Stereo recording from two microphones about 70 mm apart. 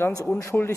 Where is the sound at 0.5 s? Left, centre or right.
Centre.